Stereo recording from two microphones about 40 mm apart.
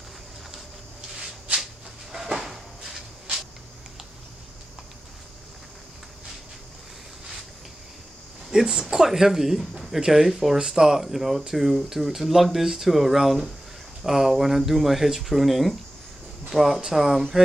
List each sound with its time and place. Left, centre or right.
2.1 s cupboard open or close: centre
8.5 s speech: centre